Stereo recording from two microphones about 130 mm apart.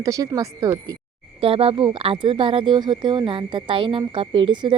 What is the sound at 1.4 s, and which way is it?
Speech, 45° right (ahead or behind).